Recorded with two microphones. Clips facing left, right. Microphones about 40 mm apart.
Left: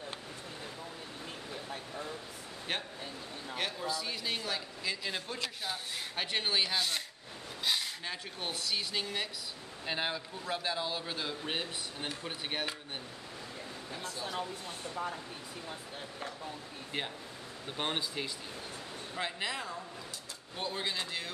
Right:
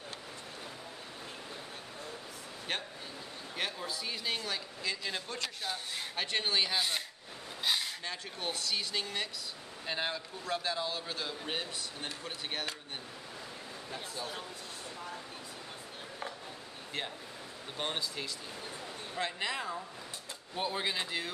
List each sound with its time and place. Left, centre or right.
2.7 s a man's voice: centre
7.6 s a sound: centre
8.0 s a man's voice: centre
13.9 s speech: centre
17.7 s a man's voice: centre
19.1 s a man's voice: centre